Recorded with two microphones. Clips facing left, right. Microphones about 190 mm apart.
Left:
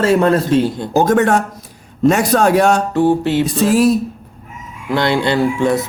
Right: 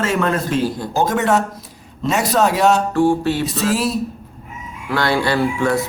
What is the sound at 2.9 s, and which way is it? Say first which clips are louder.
Speech: left 2 dB; 20° left (ahead or behind).